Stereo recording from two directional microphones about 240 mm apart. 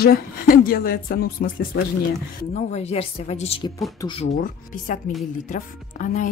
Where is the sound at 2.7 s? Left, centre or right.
Left.